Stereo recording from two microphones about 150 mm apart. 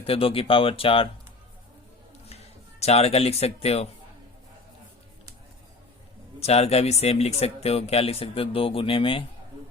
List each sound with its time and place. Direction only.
0.0 s speech: 40° left (ahead or behind)
2.8 s speech: 45° left (ahead or behind)
6.4 s speech: 45° left (ahead or behind)